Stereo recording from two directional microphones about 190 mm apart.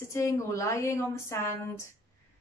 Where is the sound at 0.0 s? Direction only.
15° left (ahead or behind).